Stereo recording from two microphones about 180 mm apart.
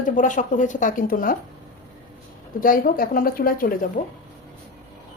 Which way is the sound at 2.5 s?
50° left (ahead or behind).